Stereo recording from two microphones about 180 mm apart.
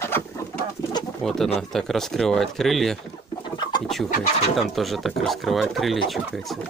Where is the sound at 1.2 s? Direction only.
Centre (ahead or behind).